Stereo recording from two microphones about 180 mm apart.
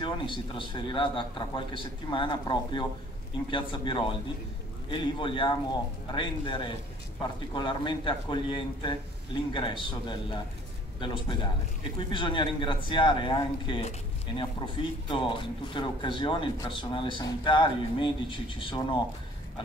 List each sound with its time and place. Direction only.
0.0 s speech: 25° left (ahead or behind)